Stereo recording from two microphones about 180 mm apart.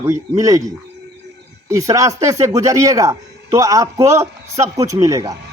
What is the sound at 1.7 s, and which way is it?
Speech, 20° right (ahead or behind).